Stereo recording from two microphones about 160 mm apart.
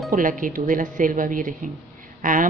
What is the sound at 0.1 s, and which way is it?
Speech, 55° right (ahead or behind).